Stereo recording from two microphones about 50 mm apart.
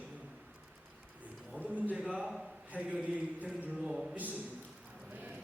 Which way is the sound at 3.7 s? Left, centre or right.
Centre.